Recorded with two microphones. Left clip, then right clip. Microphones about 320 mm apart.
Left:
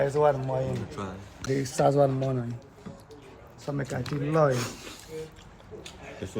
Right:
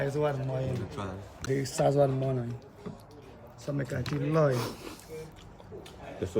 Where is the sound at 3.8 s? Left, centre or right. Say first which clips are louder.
Left 1 dB; centre.